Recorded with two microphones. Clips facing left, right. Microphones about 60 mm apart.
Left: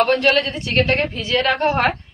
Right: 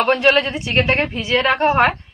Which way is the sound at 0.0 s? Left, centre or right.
Right.